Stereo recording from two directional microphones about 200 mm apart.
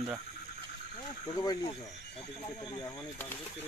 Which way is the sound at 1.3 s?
20° left (ahead or behind).